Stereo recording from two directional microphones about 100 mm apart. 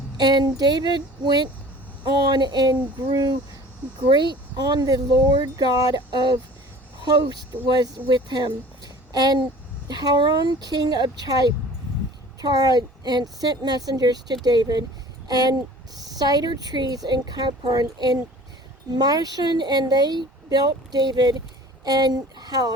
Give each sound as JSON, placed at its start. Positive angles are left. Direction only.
{"t": 0.2, "sound": "speech", "side_deg": -45}